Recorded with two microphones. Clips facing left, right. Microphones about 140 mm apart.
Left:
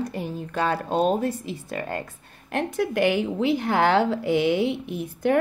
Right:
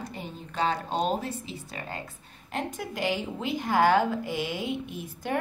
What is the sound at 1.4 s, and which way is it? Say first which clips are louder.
A woman's voice: left 8 dB; 55° left (ahead or behind).